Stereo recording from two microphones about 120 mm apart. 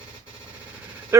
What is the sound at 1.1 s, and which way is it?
Quack, 25° right (ahead or behind).